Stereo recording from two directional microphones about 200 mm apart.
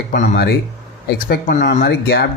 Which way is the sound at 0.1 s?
50° left (ahead or behind).